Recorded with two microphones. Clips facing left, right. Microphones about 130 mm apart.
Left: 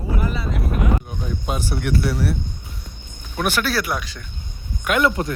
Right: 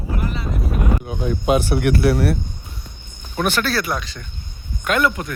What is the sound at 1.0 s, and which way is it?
Speech, 85° right.